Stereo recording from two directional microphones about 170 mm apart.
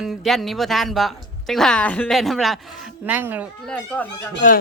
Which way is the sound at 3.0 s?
10° right (ahead or behind).